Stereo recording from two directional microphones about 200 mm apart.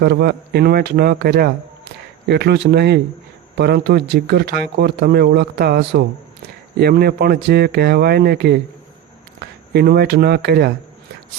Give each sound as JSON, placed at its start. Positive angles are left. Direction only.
{"t": 0.0, "sound": "speech", "side_deg": -55}
{"t": 9.7, "sound": "speech", "side_deg": -55}